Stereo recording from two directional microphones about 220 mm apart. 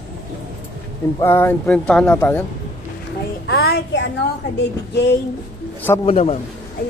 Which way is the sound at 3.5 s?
45° left (ahead or behind).